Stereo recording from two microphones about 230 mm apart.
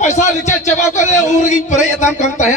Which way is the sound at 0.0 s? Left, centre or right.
Left.